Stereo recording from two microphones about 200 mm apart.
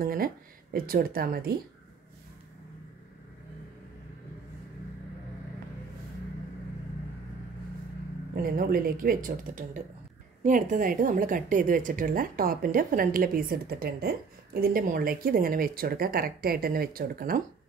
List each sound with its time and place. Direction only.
0.0 s speech: 45° right (ahead or behind)
8.4 s speech: 45° right (ahead or behind)